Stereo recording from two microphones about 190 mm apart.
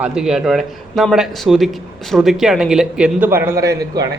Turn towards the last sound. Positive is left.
turn(degrees=-20)  # may be behind; listen again after turning